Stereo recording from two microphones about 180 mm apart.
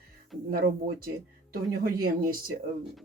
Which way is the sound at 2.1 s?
55° right (ahead or behind).